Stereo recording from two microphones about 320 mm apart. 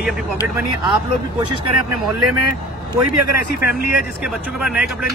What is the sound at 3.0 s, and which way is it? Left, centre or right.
Speech, right.